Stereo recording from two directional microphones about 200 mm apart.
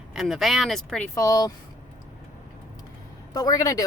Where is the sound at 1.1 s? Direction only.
15° left (ahead or behind).